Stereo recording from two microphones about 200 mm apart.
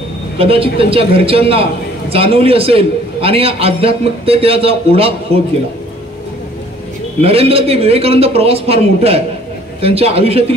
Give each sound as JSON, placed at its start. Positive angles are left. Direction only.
{"t": 0.4, "sound": "a man's voice", "side_deg": -30}
{"t": 7.2, "sound": "a man's voice", "side_deg": -30}